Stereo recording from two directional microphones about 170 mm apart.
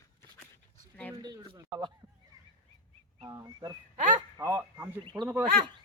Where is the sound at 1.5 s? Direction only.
25° right (ahead or behind).